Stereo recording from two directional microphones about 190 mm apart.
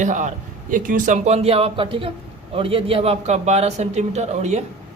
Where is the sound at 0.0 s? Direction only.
40° right (ahead or behind).